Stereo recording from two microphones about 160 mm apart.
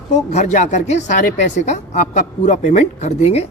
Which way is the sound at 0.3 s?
45° left (ahead or behind).